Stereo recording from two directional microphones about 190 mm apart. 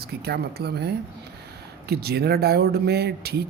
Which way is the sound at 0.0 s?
55° right (ahead or behind).